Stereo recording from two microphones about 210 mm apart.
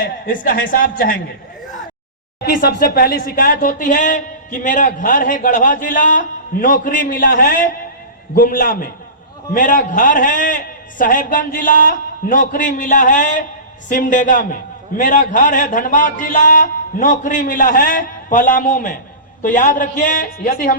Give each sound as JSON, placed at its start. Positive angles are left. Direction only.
{"t": 0.0, "sound": "speech", "side_deg": 40}
{"t": 2.4, "sound": "speech", "side_deg": 45}